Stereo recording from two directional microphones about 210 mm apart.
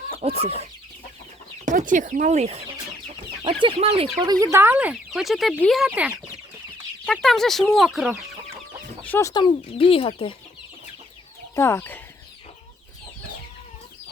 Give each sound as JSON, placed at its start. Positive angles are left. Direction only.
{"t": 0.2, "sound": "speech", "side_deg": -30}
{"t": 1.6, "sound": "speech", "side_deg": -40}
{"t": 4.5, "sound": "speech", "side_deg": -10}
{"t": 9.0, "sound": "speech", "side_deg": 10}
{"t": 11.5, "sound": "speech", "side_deg": 10}